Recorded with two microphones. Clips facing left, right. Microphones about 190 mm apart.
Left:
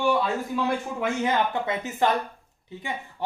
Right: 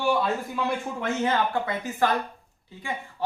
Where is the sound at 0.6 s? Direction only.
10° left (ahead or behind).